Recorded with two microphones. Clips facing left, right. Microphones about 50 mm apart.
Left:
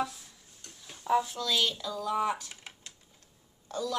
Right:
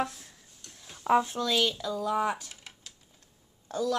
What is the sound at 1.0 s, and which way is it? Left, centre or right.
Speech, right.